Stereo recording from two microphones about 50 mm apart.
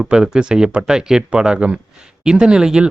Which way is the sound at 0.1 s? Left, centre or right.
Centre.